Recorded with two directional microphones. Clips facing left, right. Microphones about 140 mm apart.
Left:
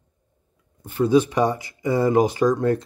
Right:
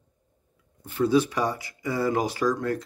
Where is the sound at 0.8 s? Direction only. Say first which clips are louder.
Left 4 dB; 20° left (ahead or behind).